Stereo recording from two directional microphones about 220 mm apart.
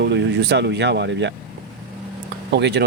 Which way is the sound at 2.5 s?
50° right (ahead or behind).